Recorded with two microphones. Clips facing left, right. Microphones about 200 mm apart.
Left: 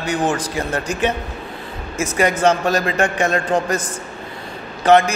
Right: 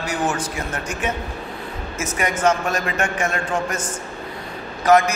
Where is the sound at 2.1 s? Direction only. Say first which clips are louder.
Left 4 dB; 35° left (ahead or behind).